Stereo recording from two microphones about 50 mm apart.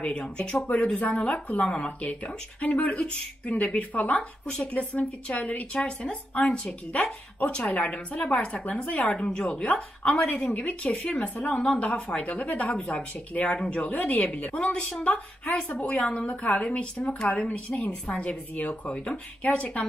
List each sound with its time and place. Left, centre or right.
0.0 s speech: left
0.9 s speech: left
11.5 s speech: centre
12.7 s speech: centre
13.3 s speech: left